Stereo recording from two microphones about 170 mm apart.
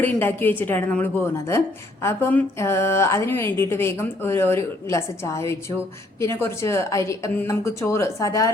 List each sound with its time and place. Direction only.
0.0 s speech: 10° left (ahead or behind)